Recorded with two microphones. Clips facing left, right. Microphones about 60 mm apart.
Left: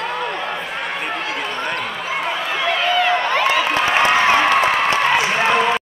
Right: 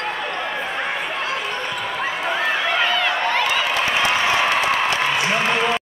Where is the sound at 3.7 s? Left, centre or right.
Left.